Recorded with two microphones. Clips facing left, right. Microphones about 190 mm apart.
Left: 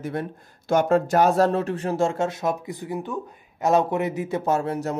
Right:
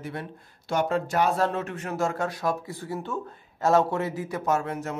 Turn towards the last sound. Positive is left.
turn(degrees=35)  # may be behind; listen again after turning